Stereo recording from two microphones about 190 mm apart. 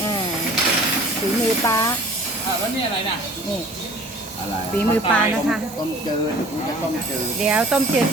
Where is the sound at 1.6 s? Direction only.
20° left (ahead or behind).